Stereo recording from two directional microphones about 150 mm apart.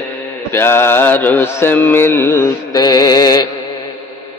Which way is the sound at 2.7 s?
25° left (ahead or behind).